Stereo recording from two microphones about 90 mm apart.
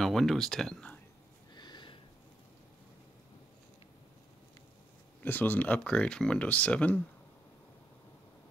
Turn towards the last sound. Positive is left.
turn(degrees=15)  # may be behind; listen again after turning